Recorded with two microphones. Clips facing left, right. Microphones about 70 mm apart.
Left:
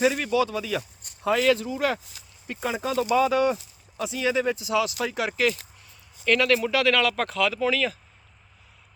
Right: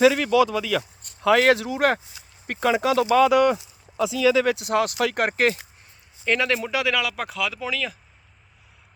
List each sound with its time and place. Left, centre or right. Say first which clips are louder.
0.0 s speech: right 5 dB; right
2.5 s speech: right 7 dB; right
4.7 s speech: right 3 dB; right
6.2 s speech: left 2 dB; centre